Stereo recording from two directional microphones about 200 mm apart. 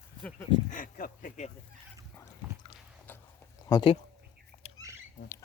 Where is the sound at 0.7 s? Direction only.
45° left (ahead or behind).